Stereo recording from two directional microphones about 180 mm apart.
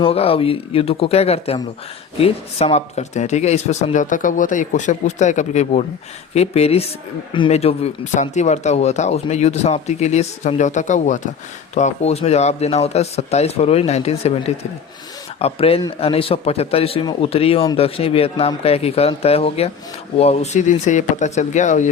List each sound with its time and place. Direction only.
0.0 s speech: 30° left (ahead or behind)